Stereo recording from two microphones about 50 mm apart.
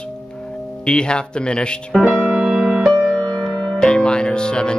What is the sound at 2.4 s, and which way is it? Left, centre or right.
Music, centre.